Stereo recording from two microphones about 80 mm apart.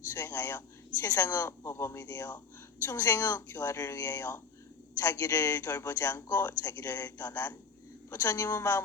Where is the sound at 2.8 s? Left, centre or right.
Left.